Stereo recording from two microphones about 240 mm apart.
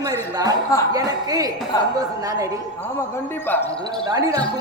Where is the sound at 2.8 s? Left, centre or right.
Centre.